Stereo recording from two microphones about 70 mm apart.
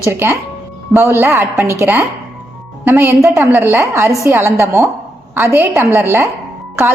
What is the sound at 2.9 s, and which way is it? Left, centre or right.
A woman's voice, right.